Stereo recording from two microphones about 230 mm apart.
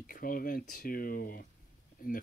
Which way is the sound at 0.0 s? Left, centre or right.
Left.